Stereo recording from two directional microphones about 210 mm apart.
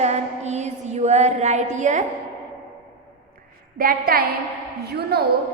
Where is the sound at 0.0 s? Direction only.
30° right (ahead or behind).